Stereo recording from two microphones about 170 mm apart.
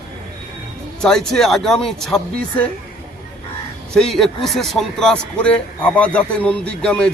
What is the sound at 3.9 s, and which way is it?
A man's voice, centre (ahead or behind).